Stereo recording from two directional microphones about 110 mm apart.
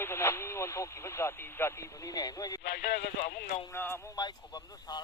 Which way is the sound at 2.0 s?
35° left (ahead or behind).